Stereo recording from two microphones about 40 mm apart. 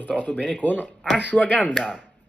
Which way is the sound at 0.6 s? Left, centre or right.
Left.